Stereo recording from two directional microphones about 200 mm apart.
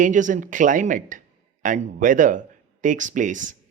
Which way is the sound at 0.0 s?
40° right (ahead or behind).